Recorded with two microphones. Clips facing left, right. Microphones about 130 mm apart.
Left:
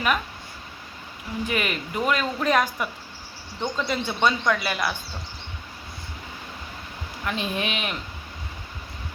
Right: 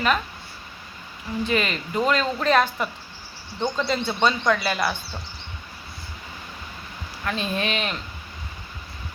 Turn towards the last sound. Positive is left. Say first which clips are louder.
# right 2 dB
turn(degrees=15)  # may be behind; listen again after turning